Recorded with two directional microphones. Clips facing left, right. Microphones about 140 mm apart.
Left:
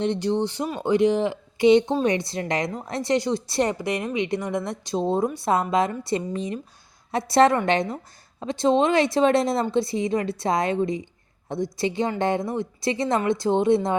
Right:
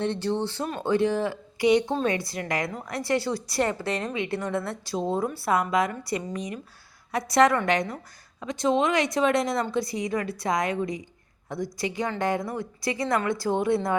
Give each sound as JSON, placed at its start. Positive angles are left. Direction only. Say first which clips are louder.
{"t": 0.0, "sound": "a woman's voice", "louder": "left 3 dB", "side_deg": 15}
{"t": 4.9, "sound": "a woman's voice", "louder": "left 4 dB", "side_deg": 25}